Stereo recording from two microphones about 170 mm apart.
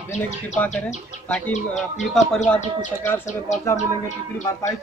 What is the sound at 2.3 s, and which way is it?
Speech, 5° left (ahead or behind).